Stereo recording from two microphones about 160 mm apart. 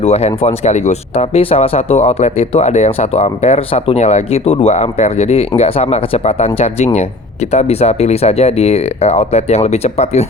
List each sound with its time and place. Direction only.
0.0 s speech: 40° left (ahead or behind)